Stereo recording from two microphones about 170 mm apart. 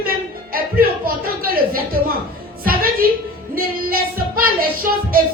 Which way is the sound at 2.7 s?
60° right (ahead or behind).